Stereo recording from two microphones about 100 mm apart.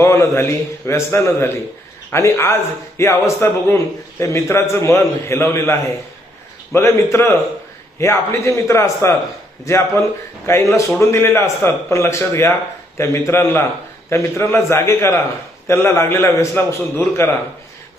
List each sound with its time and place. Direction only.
0.0 s a man's voice: 25° left (ahead or behind)
6.7 s a man's voice: 25° left (ahead or behind)